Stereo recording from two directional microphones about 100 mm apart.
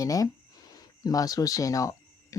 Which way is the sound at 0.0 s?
35° left (ahead or behind).